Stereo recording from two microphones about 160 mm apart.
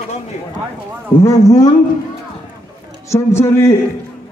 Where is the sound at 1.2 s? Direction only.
20° left (ahead or behind).